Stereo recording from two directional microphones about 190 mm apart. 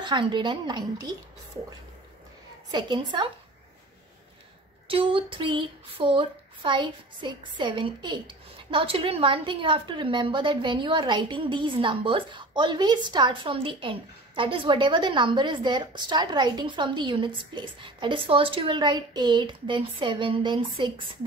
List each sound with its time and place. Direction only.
0.0 s speech: 25° right (ahead or behind)
2.7 s speech: 25° right (ahead or behind)
4.8 s speech: 30° right (ahead or behind)